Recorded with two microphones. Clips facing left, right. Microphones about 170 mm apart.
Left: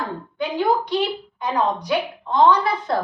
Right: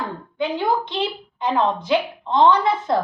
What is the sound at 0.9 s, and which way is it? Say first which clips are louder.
A woman's voice: left 3 dB; 25° right (ahead or behind).